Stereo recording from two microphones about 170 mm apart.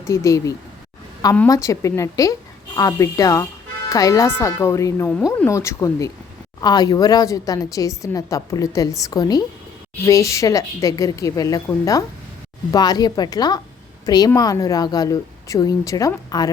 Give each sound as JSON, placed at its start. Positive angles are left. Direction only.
{"t": 0.0, "sound": "a woman's voice", "side_deg": 20}